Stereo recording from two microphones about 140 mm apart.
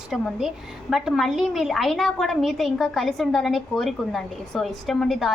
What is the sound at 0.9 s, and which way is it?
A woman's voice, centre (ahead or behind).